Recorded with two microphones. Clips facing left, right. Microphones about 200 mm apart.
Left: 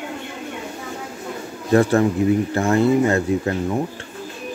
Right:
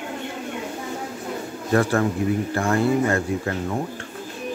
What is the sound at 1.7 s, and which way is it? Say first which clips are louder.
Speech: left 4 dB; 25° left (ahead or behind).